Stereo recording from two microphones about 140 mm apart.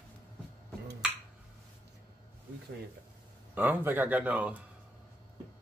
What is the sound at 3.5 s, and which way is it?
Speech, 15° right (ahead or behind).